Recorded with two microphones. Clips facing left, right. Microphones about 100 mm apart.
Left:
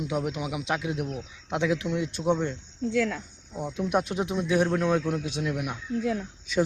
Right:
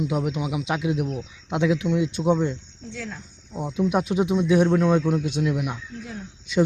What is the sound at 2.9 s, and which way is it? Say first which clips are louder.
Speech: left 9 dB; 90° left.